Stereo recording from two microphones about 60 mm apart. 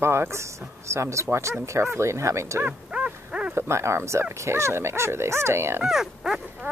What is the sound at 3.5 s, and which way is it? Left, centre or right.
Speech, right.